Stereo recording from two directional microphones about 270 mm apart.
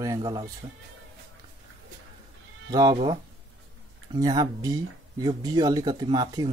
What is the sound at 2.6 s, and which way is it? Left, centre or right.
Speech, centre.